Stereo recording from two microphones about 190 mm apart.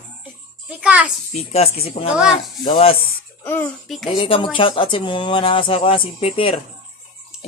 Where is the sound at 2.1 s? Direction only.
5° right (ahead or behind).